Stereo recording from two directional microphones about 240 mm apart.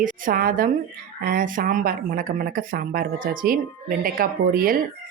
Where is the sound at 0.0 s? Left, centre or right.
Right.